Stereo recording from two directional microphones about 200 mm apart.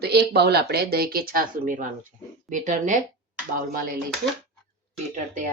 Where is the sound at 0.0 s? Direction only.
55° right (ahead or behind).